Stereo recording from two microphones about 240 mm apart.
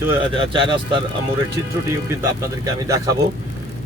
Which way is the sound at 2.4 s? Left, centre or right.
Centre.